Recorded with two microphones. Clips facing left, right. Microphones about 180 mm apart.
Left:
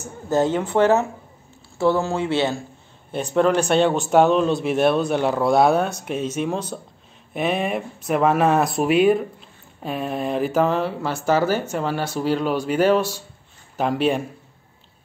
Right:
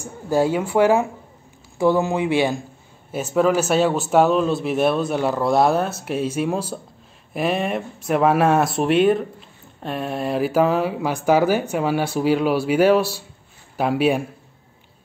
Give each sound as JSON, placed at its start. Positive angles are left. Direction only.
{"t": 0.0, "sound": "a man's voice", "side_deg": -10}